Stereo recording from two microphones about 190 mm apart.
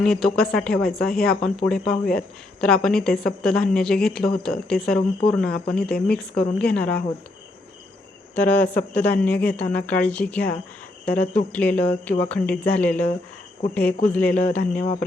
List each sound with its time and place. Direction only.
0.0 s a woman's voice: centre (ahead or behind)
8.4 s speech: 10° left (ahead or behind)